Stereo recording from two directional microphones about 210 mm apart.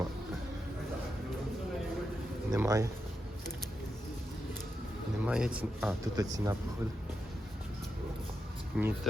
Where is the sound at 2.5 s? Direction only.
15° right (ahead or behind).